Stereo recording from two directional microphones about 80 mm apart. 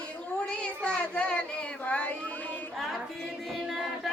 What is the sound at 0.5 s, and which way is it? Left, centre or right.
Child singing, centre.